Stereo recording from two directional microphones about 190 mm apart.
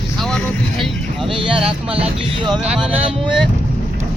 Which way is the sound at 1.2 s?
25° right (ahead or behind).